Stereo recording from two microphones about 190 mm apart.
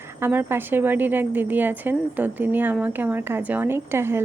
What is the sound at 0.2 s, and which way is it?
A woman's voice, 10° right (ahead or behind).